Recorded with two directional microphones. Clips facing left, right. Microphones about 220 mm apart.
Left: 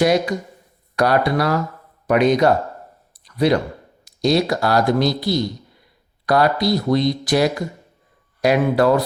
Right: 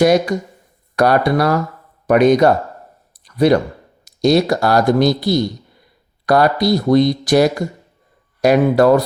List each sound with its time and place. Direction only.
0.0 s speech: 45° right (ahead or behind)
3.2 s a sound: 45° right (ahead or behind)
4.0 s speech: 45° right (ahead or behind)